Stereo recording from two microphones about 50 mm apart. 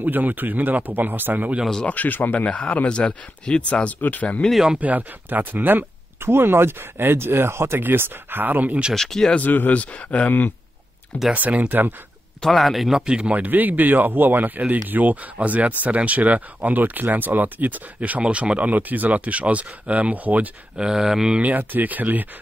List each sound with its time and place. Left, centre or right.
0.0 s speech: right
1.9 s speech: left
2.4 s speech: left
4.0 s speech: left
4.7 s speech: right
7.8 s speech: right
8.9 s speech: centre
9.3 s speech: left
11.3 s speech: right
12.4 s speech: centre
13.3 s speech: right
20.7 s speech: centre
21.4 s speech: right